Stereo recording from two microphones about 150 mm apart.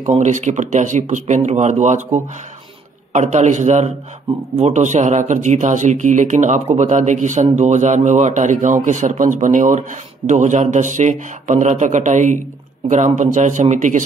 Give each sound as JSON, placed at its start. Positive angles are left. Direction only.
{"t": 0.1, "sound": "a man's voice", "side_deg": -50}